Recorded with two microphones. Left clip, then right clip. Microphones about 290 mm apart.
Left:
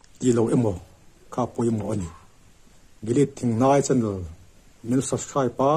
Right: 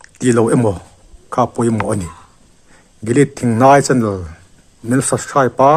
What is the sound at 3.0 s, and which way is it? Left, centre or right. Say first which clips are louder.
Speech: right 8 dB; right.